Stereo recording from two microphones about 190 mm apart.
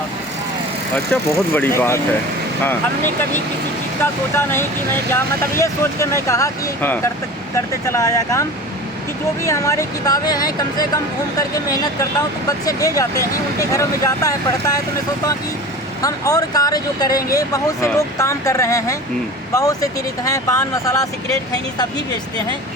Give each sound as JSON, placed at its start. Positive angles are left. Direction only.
{"t": 0.9, "sound": "speech", "side_deg": 5}
{"t": 4.0, "sound": "speech", "side_deg": 10}
{"t": 16.0, "sound": "speech", "side_deg": 20}